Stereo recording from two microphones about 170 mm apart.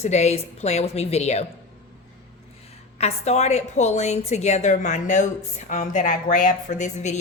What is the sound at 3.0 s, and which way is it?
A woman's voice, 40° left (ahead or behind).